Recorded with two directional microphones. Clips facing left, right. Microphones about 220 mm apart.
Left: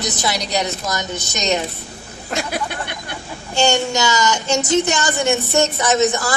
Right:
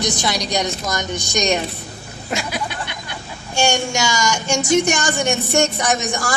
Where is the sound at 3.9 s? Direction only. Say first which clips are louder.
Left 2 dB; 10° right (ahead or behind).